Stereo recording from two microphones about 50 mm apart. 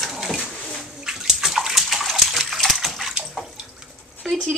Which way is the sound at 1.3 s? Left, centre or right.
Centre.